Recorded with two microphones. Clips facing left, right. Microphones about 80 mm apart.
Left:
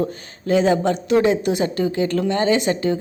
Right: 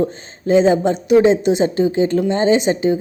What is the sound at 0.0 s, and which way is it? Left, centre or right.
Speech, right.